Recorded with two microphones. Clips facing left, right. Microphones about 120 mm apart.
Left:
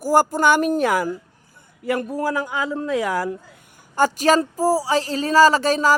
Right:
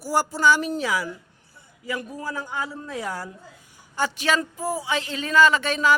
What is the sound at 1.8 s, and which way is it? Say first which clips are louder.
A man's voice: left 9 dB; 65° left (ahead or behind).